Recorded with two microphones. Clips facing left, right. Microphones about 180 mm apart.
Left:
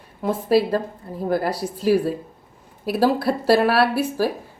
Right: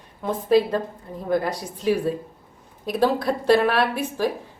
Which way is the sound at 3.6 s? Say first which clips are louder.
Left 3 dB; 35° left (ahead or behind).